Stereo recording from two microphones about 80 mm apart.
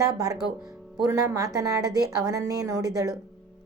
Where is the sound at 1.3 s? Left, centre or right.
Right.